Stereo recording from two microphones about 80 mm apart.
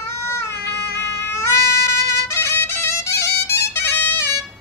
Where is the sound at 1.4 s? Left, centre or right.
Left.